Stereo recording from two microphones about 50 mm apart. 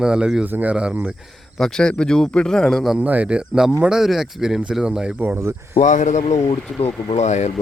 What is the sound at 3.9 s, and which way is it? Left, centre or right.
Speech, centre.